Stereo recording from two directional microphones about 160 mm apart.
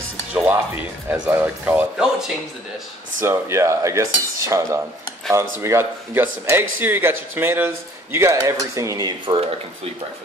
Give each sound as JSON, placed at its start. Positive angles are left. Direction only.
{"t": 0.3, "sound": "speech", "side_deg": -10}